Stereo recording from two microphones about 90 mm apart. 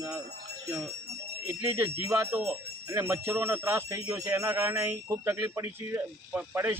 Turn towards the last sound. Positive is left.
turn(degrees=-25)  # may be behind; listen again after turning